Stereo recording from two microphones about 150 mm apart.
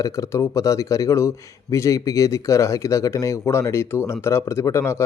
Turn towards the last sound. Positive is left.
turn(degrees=15)  # may be behind; listen again after turning